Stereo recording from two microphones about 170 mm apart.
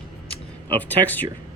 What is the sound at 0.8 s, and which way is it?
Speech, 10° left (ahead or behind).